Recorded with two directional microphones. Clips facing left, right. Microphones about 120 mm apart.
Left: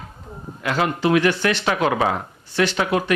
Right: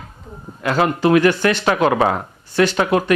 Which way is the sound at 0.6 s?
45° right (ahead or behind).